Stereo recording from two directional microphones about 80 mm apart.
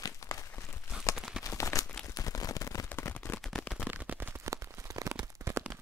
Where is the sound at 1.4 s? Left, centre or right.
Left.